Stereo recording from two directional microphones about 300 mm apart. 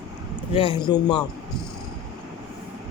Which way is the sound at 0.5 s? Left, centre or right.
Centre.